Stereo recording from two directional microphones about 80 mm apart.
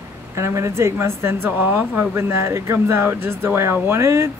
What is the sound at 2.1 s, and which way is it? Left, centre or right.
Speech, right.